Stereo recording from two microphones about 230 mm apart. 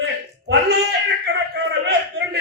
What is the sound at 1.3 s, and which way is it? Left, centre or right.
Speech, right.